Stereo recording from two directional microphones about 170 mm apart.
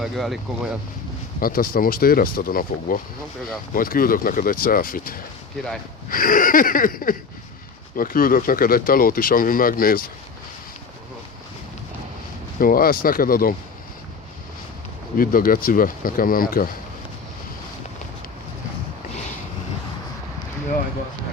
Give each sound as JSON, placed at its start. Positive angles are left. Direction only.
{"t": 0.0, "sound": "speech", "side_deg": 0}
{"t": 1.4, "sound": "speech", "side_deg": 55}
{"t": 12.5, "sound": "speech", "side_deg": 55}
{"t": 15.2, "sound": "speech", "side_deg": 55}